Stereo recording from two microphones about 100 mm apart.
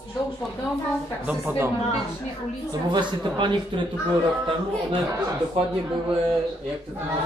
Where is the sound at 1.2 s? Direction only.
20° right (ahead or behind).